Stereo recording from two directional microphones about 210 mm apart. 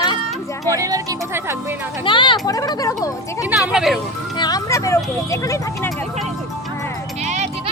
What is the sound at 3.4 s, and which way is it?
Speech, 5° right (ahead or behind).